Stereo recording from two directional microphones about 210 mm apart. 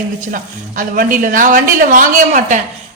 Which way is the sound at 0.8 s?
40° right (ahead or behind).